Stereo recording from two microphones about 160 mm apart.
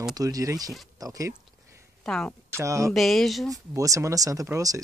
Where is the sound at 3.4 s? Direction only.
20° right (ahead or behind).